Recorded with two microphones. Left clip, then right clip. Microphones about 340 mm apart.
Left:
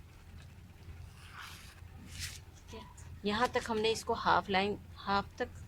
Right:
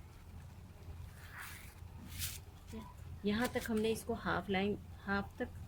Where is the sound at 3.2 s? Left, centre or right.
Centre.